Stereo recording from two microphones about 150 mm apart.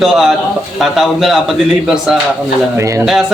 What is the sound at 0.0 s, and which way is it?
A man's voice, centre (ahead or behind).